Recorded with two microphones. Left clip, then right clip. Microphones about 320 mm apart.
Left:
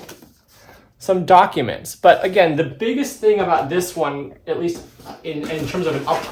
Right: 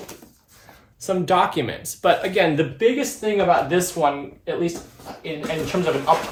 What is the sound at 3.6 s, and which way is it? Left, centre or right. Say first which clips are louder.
Speech: right 1 dB; centre.